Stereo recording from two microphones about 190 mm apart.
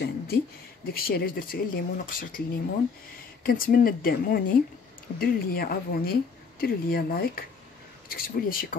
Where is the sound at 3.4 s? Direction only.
50° left (ahead or behind).